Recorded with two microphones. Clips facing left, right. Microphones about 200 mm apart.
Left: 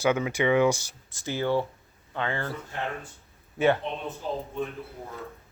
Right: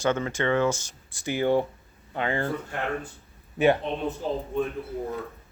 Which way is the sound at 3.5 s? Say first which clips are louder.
Right 2 dB; 15° right (ahead or behind).